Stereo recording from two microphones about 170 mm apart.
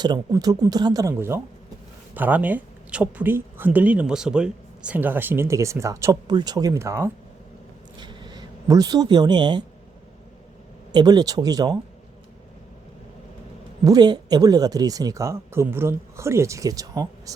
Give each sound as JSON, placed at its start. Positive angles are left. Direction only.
{"t": 0.0, "sound": "speech", "side_deg": -25}
{"t": 7.9, "sound": "speech", "side_deg": -25}
{"t": 10.9, "sound": "speech", "side_deg": -25}
{"t": 13.8, "sound": "speech", "side_deg": -25}